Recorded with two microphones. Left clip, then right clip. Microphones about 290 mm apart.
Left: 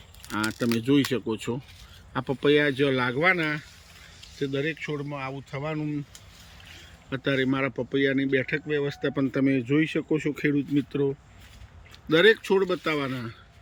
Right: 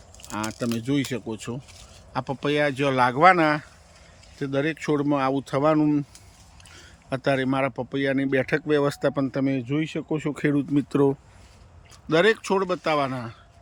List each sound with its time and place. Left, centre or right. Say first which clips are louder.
0.3 s speech: left 2 dB; centre
7.1 s speech: right 2 dB; centre
12.0 s speech: left 1 dB; centre